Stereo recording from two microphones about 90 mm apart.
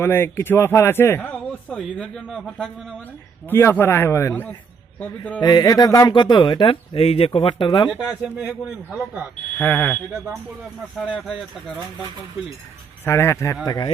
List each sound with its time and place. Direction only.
0.0 s a man's voice: 30° left (ahead or behind)
1.7 s speech: 5° left (ahead or behind)
3.5 s a man's voice: 25° left (ahead or behind)
4.9 s a man's voice: 20° left (ahead or behind)
5.4 s speech: 45° left (ahead or behind); by 7.9 s 65° left (ahead or behind)
7.9 s speech: 10° right (ahead or behind)
9.6 s a man's voice: 25° left (ahead or behind)
11.2 s speech: centre (ahead or behind)
13.1 s speech: 30° left (ahead or behind)
13.7 s speech: 50° left (ahead or behind)